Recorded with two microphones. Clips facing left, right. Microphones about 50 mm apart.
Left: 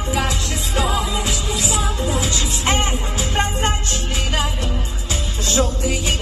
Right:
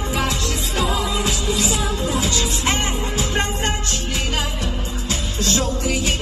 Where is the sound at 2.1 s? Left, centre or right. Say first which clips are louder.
Right 1 dB; left.